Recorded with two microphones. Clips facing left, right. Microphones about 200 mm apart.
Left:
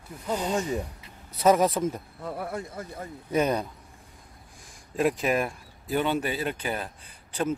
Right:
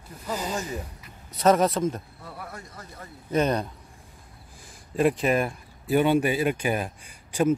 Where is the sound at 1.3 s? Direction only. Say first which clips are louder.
Right 1 dB; 10° left (ahead or behind).